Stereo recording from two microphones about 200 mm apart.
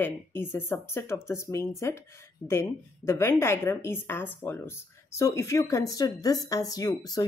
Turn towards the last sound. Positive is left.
turn(degrees=20)  # may be behind; listen again after turning